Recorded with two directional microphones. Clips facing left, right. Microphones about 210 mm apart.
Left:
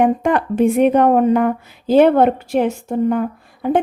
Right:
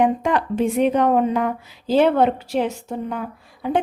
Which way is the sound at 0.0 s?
55° left (ahead or behind).